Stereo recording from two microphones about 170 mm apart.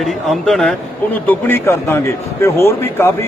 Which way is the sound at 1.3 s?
15° left (ahead or behind).